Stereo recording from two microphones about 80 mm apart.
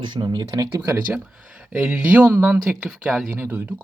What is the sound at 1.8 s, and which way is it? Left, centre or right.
Speech, centre.